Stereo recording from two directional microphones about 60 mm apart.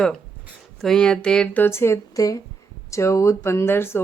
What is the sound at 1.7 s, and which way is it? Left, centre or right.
Speech, left.